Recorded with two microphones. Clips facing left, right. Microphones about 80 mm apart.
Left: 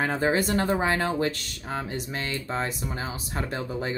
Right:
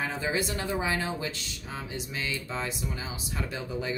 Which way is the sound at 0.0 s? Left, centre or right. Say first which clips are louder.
Left 6 dB; left.